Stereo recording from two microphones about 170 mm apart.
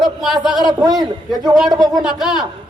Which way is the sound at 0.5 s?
25° right (ahead or behind).